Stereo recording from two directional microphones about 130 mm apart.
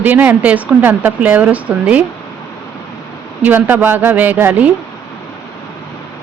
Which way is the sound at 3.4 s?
15° right (ahead or behind).